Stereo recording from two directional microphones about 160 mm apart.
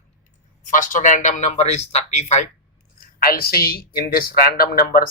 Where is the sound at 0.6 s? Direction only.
55° left (ahead or behind).